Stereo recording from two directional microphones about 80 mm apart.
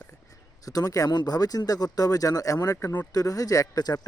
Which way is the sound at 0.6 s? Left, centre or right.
Left.